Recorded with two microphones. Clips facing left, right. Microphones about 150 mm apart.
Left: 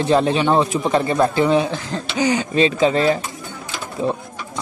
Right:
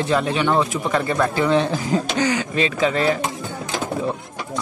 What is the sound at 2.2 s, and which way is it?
Speech, 20° left (ahead or behind).